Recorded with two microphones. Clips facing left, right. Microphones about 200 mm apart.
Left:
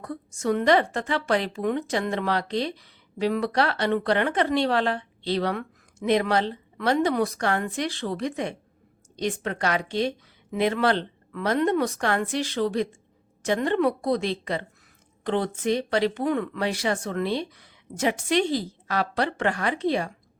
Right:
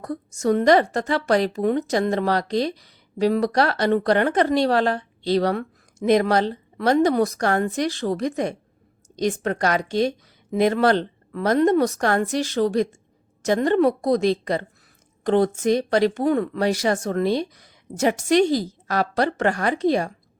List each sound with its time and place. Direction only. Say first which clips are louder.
0.0 s a woman's voice: right 5 dB; 40° right (ahead or behind)